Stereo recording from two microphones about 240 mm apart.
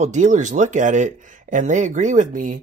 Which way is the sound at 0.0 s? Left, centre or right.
Right.